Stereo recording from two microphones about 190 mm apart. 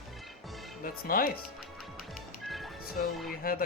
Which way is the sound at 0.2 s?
Centre (ahead or behind).